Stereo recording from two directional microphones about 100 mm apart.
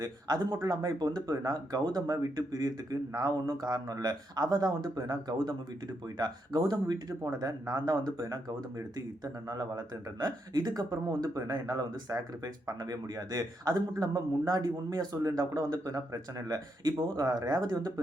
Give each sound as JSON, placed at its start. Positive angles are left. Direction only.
{"t": 0.0, "sound": "a man's voice", "side_deg": -40}